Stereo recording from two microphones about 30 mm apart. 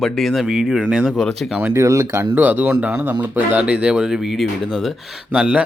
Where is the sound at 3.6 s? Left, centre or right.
Right.